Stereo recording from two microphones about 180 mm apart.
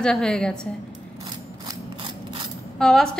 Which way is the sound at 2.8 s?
5° left (ahead or behind).